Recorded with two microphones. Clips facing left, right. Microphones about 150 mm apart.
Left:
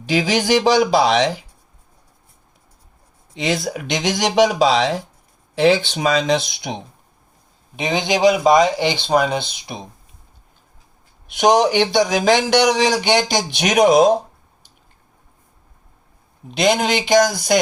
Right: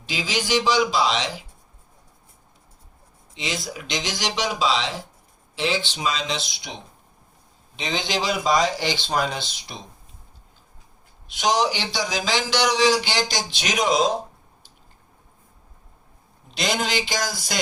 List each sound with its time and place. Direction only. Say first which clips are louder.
0.0 s speech: left 9 dB; 60° left (ahead or behind)
3.3 s speech: left 9 dB; 55° left (ahead or behind)
7.8 s a man's voice: left 9 dB; 55° left (ahead or behind)
11.3 s a man's voice: left 7 dB; 55° left (ahead or behind)
16.5 s a man's voice: left 8 dB; 55° left (ahead or behind)